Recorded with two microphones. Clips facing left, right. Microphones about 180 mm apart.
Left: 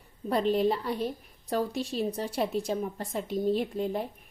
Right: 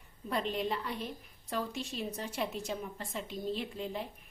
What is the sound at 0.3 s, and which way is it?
A woman's voice, 35° left (ahead or behind).